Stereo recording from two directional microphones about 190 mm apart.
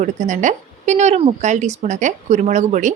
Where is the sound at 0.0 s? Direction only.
40° right (ahead or behind).